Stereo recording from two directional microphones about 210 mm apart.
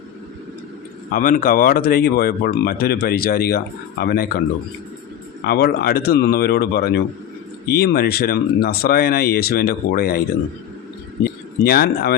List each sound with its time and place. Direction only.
1.1 s speech: 40° left (ahead or behind)
5.5 s speech: 50° left (ahead or behind)
11.2 s speech: 45° left (ahead or behind)